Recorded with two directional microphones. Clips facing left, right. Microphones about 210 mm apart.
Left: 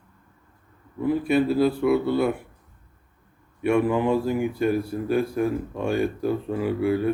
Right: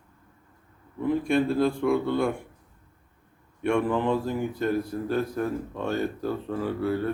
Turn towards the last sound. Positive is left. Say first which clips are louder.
# left 4 dB
turn(degrees=10)  # may be behind; listen again after turning